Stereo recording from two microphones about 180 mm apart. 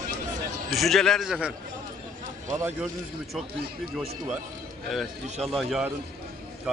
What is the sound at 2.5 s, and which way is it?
Speech, 15° right (ahead or behind).